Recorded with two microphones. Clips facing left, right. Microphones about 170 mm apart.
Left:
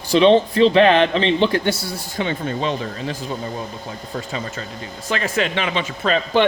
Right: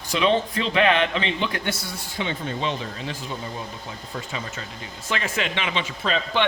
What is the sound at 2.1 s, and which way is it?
Speech, 50° left (ahead or behind).